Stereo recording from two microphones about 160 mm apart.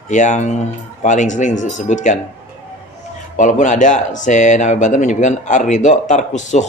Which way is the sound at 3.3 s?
50° left (ahead or behind).